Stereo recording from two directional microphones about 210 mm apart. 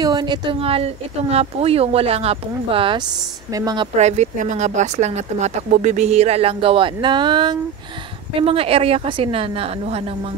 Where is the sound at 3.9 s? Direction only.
35° right (ahead or behind).